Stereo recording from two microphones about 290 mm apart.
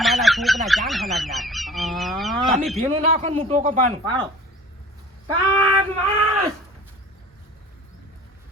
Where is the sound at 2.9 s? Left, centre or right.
Centre.